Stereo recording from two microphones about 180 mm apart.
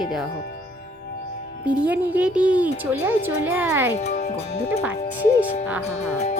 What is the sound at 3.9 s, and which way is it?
Speech, 40° left (ahead or behind).